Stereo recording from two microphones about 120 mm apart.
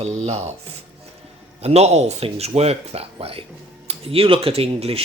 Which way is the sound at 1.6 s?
60° right (ahead or behind).